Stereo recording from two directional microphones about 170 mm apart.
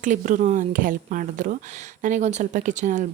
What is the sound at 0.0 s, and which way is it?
Speech, 50° right (ahead or behind).